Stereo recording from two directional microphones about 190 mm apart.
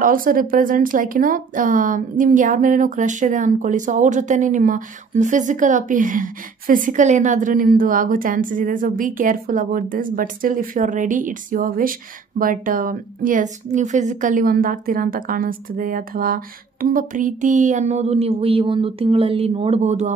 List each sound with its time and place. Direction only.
0.0 s speech: 45° right (ahead or behind)